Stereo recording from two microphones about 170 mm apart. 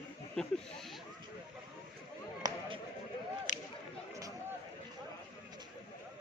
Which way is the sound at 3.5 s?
45° left (ahead or behind).